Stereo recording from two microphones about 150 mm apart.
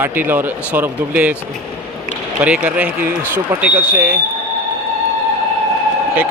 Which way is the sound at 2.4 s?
5° right (ahead or behind).